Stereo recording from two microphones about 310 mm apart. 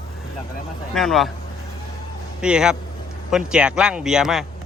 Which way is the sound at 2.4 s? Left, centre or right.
Centre.